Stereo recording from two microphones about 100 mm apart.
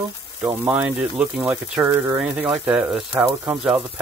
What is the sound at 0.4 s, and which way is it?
Speech, 15° right (ahead or behind).